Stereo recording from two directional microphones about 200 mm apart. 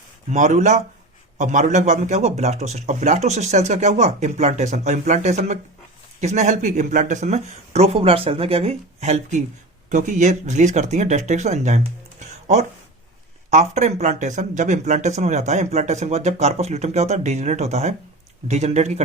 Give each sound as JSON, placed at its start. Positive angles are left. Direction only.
{"t": 0.3, "sound": "speech", "side_deg": -35}
{"t": 13.5, "sound": "speech", "side_deg": -35}